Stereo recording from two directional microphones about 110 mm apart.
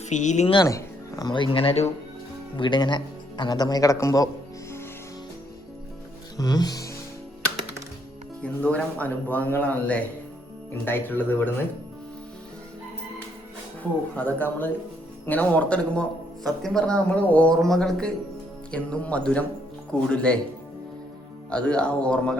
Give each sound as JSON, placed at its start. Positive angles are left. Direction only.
{"t": 0.0, "sound": "speech", "side_deg": 90}
{"t": 0.6, "sound": "speech", "side_deg": 30}
{"t": 1.3, "sound": "speech", "side_deg": 50}
{"t": 2.6, "sound": "speech", "side_deg": 45}
{"t": 6.3, "sound": "music", "side_deg": 35}
{"t": 8.4, "sound": "a man's voice", "side_deg": 10}
{"t": 14.2, "sound": "a man's voice", "side_deg": 15}
{"t": 21.5, "sound": "a man's voice", "side_deg": 10}